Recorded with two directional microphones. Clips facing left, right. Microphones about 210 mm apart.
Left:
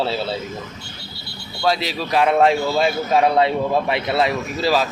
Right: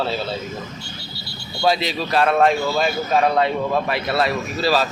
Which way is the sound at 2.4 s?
25° left (ahead or behind).